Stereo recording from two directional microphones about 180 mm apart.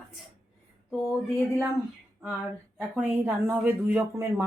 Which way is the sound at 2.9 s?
10° right (ahead or behind).